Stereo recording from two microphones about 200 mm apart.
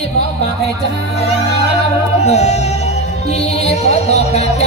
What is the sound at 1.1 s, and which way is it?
Music, 35° left (ahead or behind).